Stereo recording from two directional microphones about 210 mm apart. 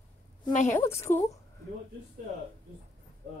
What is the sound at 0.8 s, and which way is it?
Speech, 10° left (ahead or behind).